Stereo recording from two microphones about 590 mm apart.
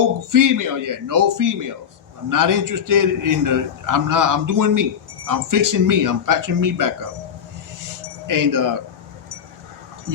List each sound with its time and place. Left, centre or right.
0.3 s a man's voice: right
8.3 s a man's voice: right